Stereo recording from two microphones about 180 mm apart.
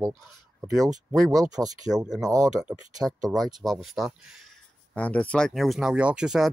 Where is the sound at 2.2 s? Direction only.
20° right (ahead or behind).